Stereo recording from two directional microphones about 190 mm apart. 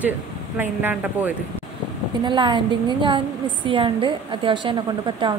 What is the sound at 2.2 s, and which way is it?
A woman's voice, 25° right (ahead or behind).